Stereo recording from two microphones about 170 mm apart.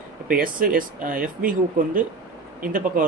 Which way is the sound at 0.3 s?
55° right (ahead or behind).